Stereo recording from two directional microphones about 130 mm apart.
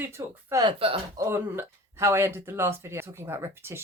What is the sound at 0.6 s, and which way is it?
Speech, 40° right (ahead or behind).